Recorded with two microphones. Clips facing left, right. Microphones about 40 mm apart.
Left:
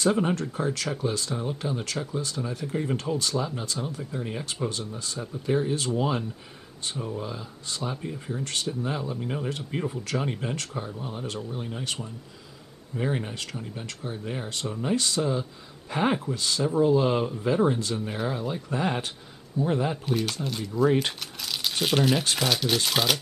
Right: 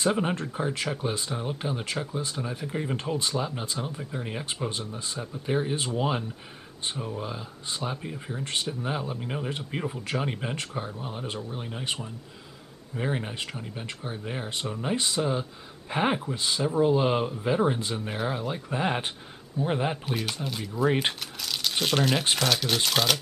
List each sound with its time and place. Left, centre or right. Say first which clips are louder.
0.0 s speech: left 2 dB; centre
5.2 s speech: left 3 dB; centre
5.6 s speech: left 2 dB; right
20.1 s speech: left 3 dB; centre
21.2 s crumpling: even; centre
21.8 s speech: left 2 dB; centre